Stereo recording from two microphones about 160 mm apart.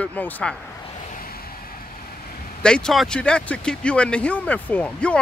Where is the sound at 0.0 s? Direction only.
10° left (ahead or behind).